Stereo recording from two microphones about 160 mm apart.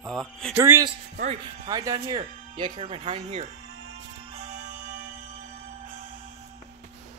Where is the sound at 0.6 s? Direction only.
15° right (ahead or behind); by 3.4 s 40° right (ahead or behind).